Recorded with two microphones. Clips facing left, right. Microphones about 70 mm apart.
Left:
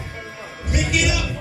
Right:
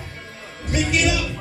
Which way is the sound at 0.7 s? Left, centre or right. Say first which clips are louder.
Right 1 dB; centre.